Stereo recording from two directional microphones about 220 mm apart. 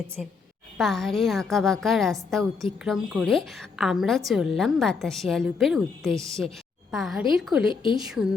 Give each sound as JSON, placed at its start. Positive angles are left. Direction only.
{"t": 0.2, "sound": "a woman's voice", "side_deg": 0}
{"t": 7.7, "sound": "a woman's voice", "side_deg": 20}
{"t": 7.9, "sound": "a woman's voice", "side_deg": -5}